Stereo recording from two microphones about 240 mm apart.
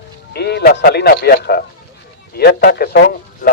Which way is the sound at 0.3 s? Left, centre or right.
Left.